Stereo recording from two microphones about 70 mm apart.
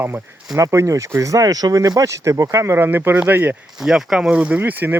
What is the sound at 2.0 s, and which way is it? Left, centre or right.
Speech, right.